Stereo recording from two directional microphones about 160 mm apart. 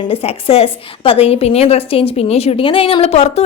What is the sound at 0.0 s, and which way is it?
A woman's voice, 35° left (ahead or behind).